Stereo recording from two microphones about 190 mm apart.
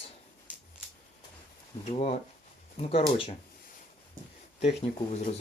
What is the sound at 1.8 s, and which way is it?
Speech, 35° left (ahead or behind).